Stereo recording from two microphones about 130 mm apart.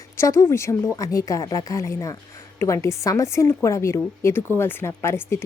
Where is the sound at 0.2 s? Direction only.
20° left (ahead or behind).